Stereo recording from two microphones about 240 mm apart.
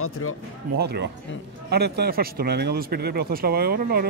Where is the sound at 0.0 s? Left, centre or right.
Left.